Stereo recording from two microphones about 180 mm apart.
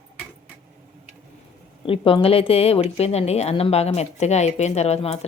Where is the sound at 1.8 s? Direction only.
30° left (ahead or behind).